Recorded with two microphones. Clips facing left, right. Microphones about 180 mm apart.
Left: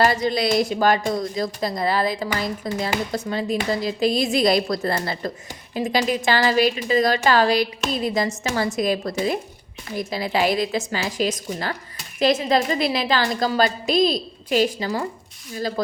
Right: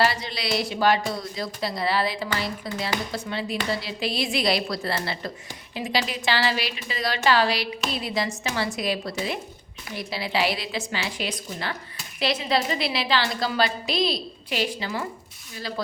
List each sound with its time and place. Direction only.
0.0 s a woman's voice: 45° left (ahead or behind)